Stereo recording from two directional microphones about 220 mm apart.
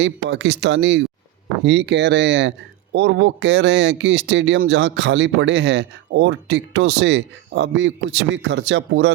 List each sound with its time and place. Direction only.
0.0 s speech: 55° right (ahead or behind)